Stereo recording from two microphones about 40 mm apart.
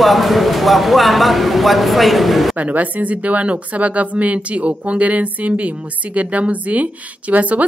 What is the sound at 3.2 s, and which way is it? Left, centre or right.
Speech, right.